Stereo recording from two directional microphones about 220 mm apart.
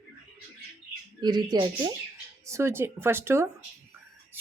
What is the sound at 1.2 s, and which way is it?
A woman's voice, 20° right (ahead or behind).